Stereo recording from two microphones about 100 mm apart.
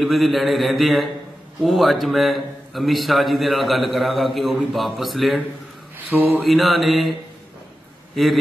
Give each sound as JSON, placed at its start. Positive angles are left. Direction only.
{"t": 0.0, "sound": "a man's voice", "side_deg": 0}
{"t": 6.1, "sound": "mantra", "side_deg": -15}
{"t": 6.4, "sound": "a man's voice", "side_deg": 0}